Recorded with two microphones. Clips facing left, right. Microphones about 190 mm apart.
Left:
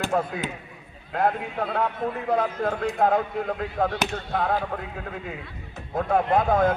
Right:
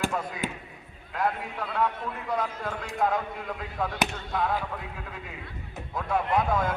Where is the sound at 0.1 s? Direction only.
60° left (ahead or behind).